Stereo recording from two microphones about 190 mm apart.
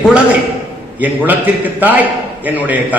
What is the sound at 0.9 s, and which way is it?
A man's voice, 10° right (ahead or behind).